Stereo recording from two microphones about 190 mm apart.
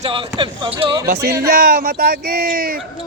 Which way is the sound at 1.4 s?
55° right (ahead or behind).